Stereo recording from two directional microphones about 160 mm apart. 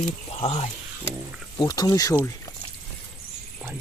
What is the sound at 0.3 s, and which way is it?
Speech, 40° left (ahead or behind).